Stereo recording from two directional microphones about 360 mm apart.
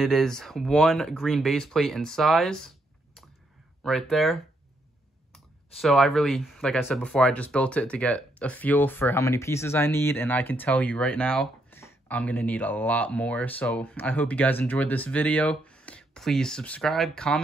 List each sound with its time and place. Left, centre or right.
0.0 s speech: centre
3.8 s speech: centre
5.8 s speech: centre